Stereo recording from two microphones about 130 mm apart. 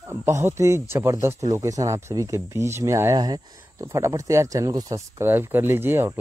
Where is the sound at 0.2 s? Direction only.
20° right (ahead or behind).